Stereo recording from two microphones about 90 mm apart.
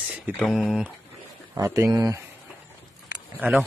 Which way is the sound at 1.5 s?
35° right (ahead or behind).